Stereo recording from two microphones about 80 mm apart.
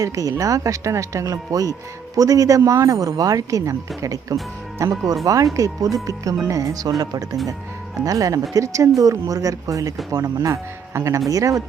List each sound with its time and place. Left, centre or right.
0.0 s speech: right